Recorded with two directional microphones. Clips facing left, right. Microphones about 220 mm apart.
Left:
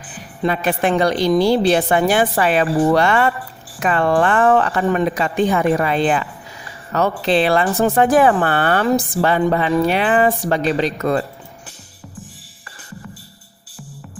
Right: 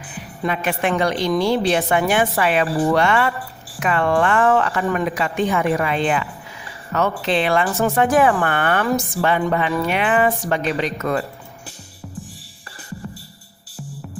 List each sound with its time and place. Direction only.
0.4 s a woman's voice: 35° left (ahead or behind)